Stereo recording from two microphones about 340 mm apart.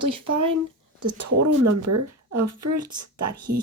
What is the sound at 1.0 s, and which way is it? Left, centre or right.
A woman's voice, right.